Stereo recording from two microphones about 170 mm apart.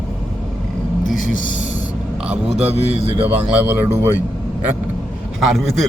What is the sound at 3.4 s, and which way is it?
Speech, 5° right (ahead or behind).